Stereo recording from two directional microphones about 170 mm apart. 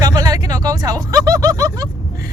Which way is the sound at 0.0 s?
20° right (ahead or behind).